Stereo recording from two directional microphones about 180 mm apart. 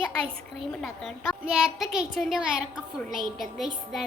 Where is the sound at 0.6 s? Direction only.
Centre (ahead or behind).